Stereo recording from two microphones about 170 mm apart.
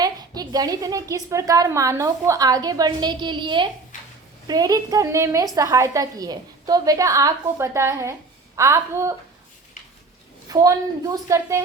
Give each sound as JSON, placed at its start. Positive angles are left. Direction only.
{"t": 0.0, "sound": "a woman's voice", "side_deg": -20}
{"t": 10.5, "sound": "a woman's voice", "side_deg": -20}